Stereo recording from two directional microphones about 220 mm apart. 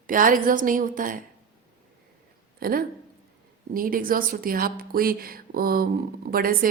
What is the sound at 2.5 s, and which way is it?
A woman's voice, 40° right (ahead or behind).